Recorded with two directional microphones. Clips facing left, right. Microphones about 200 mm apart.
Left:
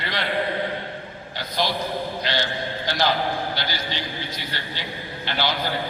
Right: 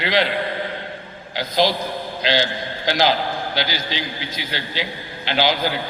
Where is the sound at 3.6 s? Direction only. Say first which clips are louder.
Right 4 dB; 90° right.